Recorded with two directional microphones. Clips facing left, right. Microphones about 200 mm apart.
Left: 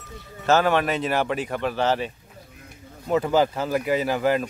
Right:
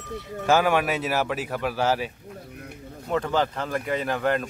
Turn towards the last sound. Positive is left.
turn(degrees=5)  # may be behind; listen again after turning